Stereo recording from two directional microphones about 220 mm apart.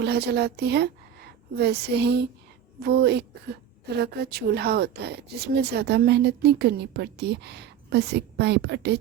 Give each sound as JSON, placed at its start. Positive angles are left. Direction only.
{"t": 0.0, "sound": "a woman's voice", "side_deg": -50}